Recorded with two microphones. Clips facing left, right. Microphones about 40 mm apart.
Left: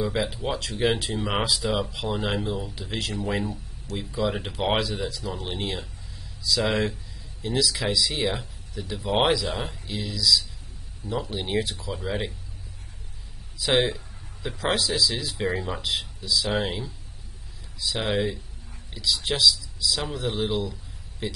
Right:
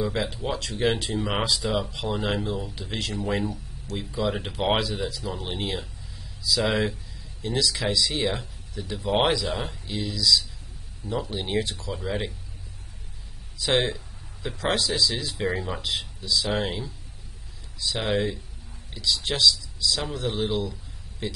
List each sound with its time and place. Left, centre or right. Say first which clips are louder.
0.0 s speech: left 1 dB; centre
13.6 s speech: left 1 dB; centre